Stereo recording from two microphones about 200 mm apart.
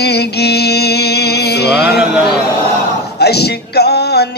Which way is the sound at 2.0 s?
5° right (ahead or behind).